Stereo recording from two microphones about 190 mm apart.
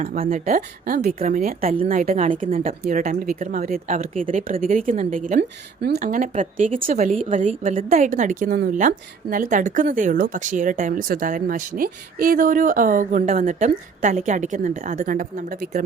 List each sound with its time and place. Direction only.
0.1 s a woman's voice: 45° right (ahead or behind)
5.4 s speech: 60° right (ahead or behind)
6.0 s a woman's voice: 45° right (ahead or behind)